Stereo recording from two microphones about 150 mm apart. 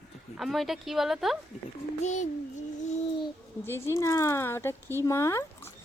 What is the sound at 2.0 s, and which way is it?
Speech, 50° left (ahead or behind).